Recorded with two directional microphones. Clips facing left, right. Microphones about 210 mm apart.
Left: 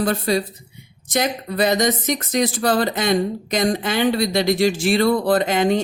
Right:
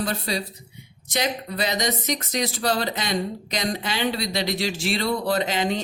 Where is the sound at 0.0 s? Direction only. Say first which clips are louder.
Left 7 dB; 50° left (ahead or behind).